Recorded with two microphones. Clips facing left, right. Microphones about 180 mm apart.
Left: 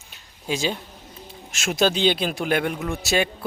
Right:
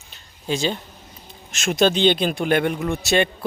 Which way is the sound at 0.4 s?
5° left (ahead or behind).